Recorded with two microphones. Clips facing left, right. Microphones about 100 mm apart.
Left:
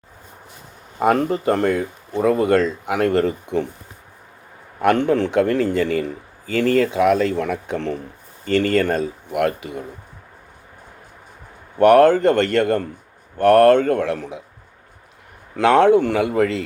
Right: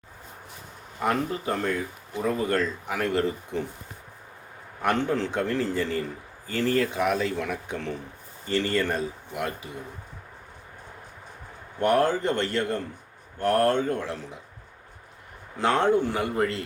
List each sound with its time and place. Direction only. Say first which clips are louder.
0.9 s speech: left 9 dB; 65° left (ahead or behind)
4.8 s speech: left 8 dB; 65° left (ahead or behind)
11.8 s speech: left 11 dB; 70° left (ahead or behind)
15.5 s speech: left 9 dB; 85° left